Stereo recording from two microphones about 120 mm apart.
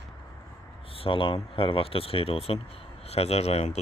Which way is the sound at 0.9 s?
50° left (ahead or behind).